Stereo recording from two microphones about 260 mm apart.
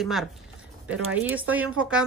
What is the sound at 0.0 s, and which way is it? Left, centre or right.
Speech, centre.